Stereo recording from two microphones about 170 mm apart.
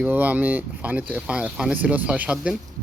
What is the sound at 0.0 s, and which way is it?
Speech, 10° right (ahead or behind).